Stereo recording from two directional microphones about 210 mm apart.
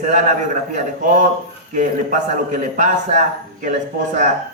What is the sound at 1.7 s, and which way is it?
A man's voice, 35° right (ahead or behind).